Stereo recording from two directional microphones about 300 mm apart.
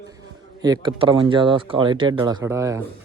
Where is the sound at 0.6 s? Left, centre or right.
Centre.